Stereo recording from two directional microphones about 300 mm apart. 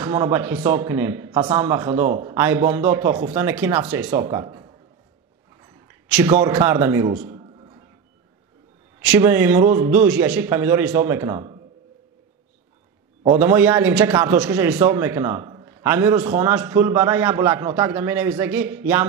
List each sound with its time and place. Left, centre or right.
0.0 s a man's voice: centre
6.0 s a man's voice: centre
9.0 s a man's voice: centre
13.2 s a man's voice: centre